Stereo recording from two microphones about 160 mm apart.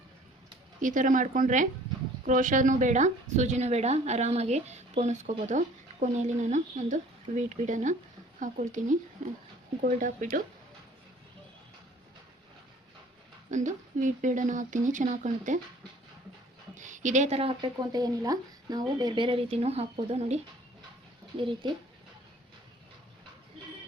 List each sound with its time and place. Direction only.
0.8 s a woman's voice: 55° right (ahead or behind)
13.5 s a woman's voice: 50° right (ahead or behind)
16.7 s speech: 50° right (ahead or behind); by 21.7 s 30° right (ahead or behind)